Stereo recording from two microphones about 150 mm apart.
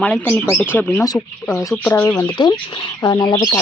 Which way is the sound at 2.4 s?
30° left (ahead or behind).